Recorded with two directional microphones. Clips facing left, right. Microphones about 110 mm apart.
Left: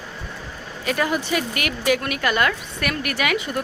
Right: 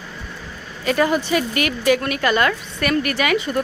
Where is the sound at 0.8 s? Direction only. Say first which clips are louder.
Right 4 dB; centre (ahead or behind).